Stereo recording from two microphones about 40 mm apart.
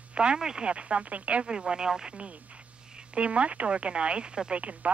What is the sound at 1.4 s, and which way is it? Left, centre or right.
Speech, centre.